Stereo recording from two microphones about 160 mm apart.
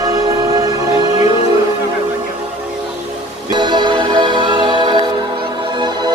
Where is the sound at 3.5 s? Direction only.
30° right (ahead or behind).